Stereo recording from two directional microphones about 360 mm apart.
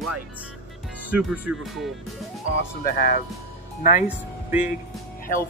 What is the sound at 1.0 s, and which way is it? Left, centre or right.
Speech, centre.